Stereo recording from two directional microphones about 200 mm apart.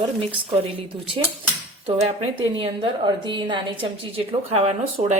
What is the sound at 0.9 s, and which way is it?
A woman's voice, 25° right (ahead or behind).